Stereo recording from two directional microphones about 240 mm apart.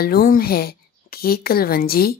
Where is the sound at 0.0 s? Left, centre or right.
Left.